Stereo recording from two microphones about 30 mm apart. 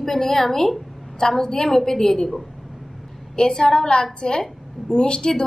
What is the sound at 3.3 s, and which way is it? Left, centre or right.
A woman's voice, left.